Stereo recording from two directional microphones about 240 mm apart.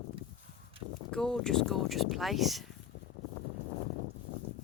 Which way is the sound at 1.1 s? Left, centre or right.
Centre.